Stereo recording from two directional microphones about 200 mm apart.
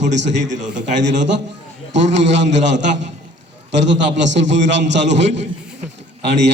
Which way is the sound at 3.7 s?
65° right (ahead or behind).